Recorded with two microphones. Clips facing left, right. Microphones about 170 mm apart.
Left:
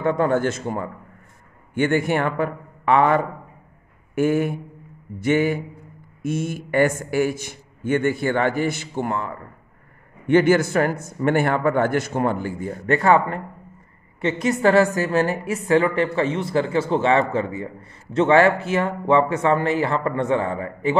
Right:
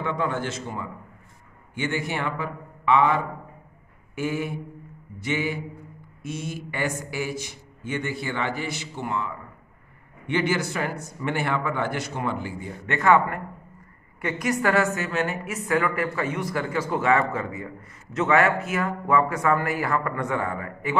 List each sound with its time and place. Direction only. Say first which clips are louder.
0.0 s a man's voice: left 8 dB; 45° left (ahead or behind); by 20.9 s 30° left (ahead or behind)